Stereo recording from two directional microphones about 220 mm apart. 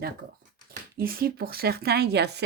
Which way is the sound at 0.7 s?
40° right (ahead or behind).